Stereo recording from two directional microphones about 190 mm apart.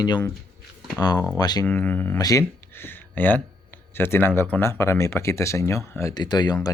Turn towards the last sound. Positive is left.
turn(degrees=20)  # may be behind; listen again after turning